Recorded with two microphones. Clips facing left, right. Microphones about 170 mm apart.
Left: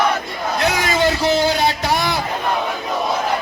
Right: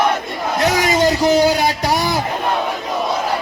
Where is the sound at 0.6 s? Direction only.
15° right (ahead or behind).